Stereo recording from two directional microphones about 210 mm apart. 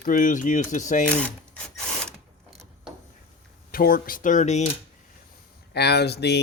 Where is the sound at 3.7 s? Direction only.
45° left (ahead or behind).